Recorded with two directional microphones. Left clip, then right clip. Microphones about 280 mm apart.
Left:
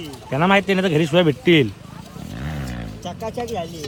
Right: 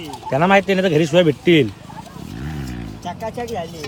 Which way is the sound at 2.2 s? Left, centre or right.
Centre.